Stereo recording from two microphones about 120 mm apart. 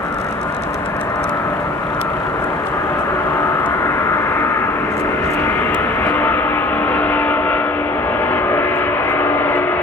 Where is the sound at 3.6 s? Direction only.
20° left (ahead or behind).